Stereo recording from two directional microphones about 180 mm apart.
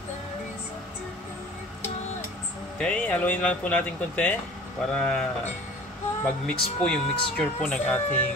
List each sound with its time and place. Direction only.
2.8 s speech: 5° left (ahead or behind)